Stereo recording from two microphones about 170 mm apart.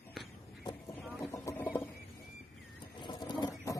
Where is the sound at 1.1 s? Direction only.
15° left (ahead or behind).